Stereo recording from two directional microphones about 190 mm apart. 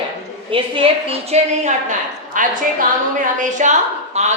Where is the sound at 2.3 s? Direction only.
45° right (ahead or behind).